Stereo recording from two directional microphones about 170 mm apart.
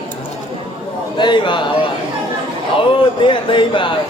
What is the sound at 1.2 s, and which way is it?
Speech, 30° left (ahead or behind).